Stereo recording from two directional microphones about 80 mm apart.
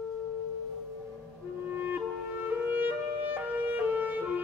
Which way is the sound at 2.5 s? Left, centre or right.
Right.